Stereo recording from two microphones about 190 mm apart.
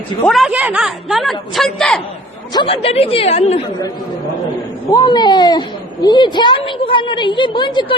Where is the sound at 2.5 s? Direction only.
25° left (ahead or behind).